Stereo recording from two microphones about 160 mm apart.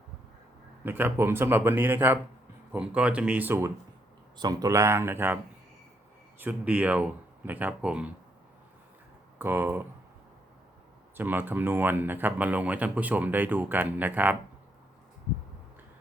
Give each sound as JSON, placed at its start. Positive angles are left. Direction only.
{"t": 0.9, "sound": "speech", "side_deg": -10}
{"t": 6.4, "sound": "speech", "side_deg": -10}
{"t": 9.4, "sound": "speech", "side_deg": -15}
{"t": 11.2, "sound": "speech", "side_deg": -10}